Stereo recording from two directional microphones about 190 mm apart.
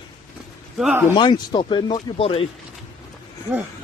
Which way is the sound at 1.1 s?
25° left (ahead or behind).